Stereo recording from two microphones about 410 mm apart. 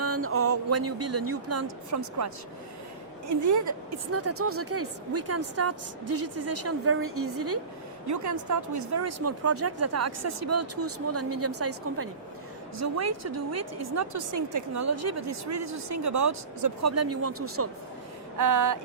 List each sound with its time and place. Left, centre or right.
0.0 s a woman's voice: right
3.4 s a woman's voice: right
8.1 s a woman's voice: right
18.3 s a sound: right